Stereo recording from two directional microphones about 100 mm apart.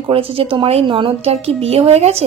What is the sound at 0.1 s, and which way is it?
A woman's voice, 70° right (ahead or behind).